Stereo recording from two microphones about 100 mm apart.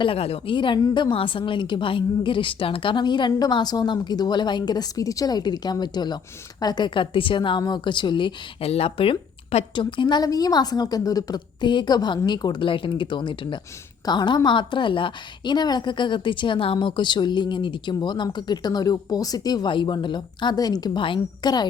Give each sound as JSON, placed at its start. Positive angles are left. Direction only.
{"t": 0.0, "sound": "a woman's voice", "side_deg": 75}
{"t": 0.5, "sound": "a woman's voice", "side_deg": 55}
{"t": 0.8, "sound": "a woman's voice", "side_deg": 40}
{"t": 1.1, "sound": "a woman's voice", "side_deg": 60}
{"t": 8.6, "sound": "speech", "side_deg": 90}
{"t": 9.7, "sound": "a woman's voice", "side_deg": 50}
{"t": 19.7, "sound": "a woman's voice", "side_deg": 50}